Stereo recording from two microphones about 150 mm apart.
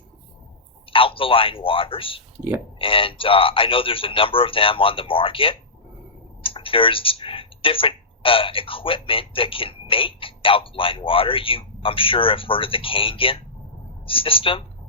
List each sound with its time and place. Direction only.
0.9 s speech: 35° left (ahead or behind)